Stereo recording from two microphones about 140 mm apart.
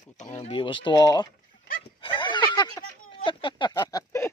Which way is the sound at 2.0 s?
35° left (ahead or behind).